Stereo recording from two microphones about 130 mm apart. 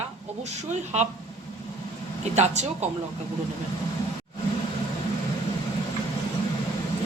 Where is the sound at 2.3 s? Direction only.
60° right (ahead or behind).